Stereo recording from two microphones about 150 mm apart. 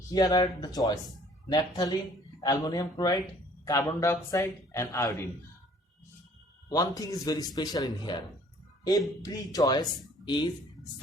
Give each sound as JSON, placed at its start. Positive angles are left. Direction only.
{"t": 0.1, "sound": "a man's voice", "side_deg": 25}
{"t": 6.7, "sound": "a man's voice", "side_deg": 25}